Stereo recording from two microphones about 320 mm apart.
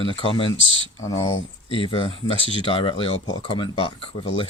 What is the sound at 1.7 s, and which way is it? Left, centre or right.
Speech, centre.